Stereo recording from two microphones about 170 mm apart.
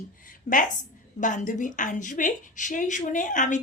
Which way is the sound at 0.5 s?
45° left (ahead or behind).